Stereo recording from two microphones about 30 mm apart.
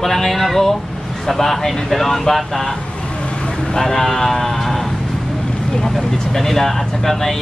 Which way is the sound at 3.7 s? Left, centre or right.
Centre.